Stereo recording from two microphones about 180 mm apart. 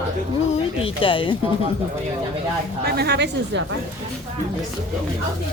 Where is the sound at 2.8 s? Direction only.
65° right (ahead or behind).